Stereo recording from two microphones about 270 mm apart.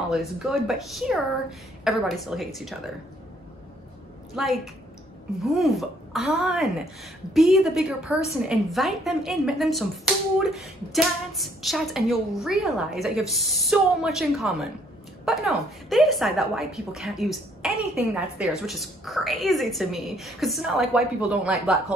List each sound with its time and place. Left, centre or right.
0.1 s a woman's voice: centre
4.4 s a woman's voice: centre